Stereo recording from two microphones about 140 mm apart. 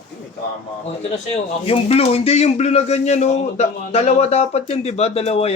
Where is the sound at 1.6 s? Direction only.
45° left (ahead or behind).